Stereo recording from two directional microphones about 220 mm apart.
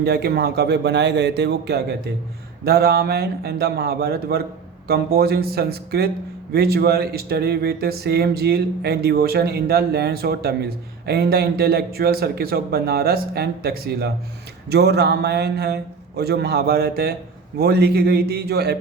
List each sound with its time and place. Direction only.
0.0 s speech: 45° right (ahead or behind)